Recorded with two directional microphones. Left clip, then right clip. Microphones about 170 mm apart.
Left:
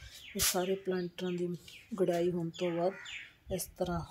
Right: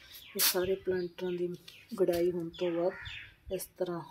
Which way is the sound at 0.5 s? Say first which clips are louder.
Right 1 dB; 10° left (ahead or behind).